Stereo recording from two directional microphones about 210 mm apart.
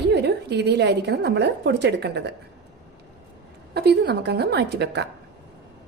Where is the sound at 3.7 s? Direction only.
50° right (ahead or behind).